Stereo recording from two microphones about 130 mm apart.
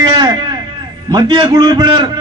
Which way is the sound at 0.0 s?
35° right (ahead or behind).